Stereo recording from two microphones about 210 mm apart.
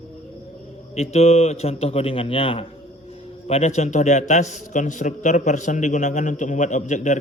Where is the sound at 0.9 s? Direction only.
30° left (ahead or behind).